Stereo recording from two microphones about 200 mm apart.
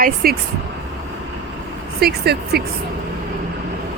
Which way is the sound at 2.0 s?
50° right (ahead or behind).